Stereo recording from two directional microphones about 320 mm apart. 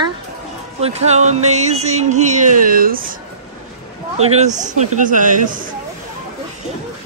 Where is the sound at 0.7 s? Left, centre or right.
Centre.